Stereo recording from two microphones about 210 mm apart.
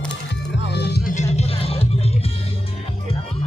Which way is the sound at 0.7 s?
50° left (ahead or behind).